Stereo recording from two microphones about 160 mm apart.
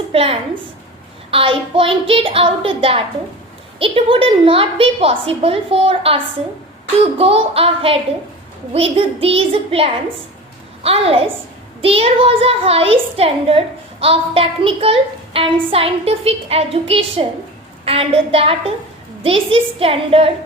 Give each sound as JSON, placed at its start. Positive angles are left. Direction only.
{"t": 0.1, "sound": "a woman's voice", "side_deg": -40}